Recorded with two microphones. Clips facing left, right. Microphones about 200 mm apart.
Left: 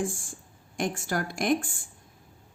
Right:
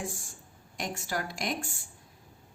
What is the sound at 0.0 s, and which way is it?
A woman's voice, 50° left (ahead or behind).